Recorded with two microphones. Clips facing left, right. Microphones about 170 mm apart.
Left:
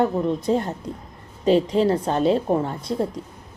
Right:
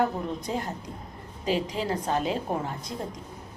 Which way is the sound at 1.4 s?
30° left (ahead or behind).